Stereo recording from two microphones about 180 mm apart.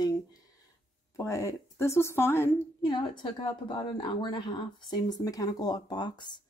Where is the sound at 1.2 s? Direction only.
15° left (ahead or behind).